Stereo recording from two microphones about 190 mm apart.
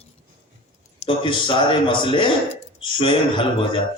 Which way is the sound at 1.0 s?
25° left (ahead or behind).